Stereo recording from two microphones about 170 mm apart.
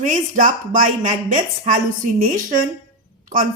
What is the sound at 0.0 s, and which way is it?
Speech, 50° right (ahead or behind).